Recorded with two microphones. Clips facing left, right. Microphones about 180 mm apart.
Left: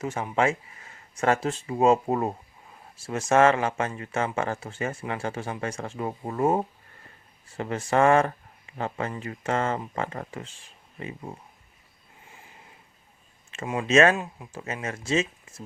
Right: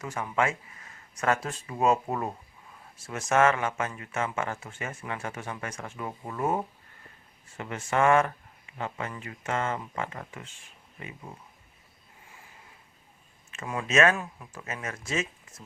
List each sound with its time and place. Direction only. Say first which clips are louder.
0.0 s speech: left 4 dB; 25° left (ahead or behind)
13.5 s speech: left 6 dB; 25° left (ahead or behind)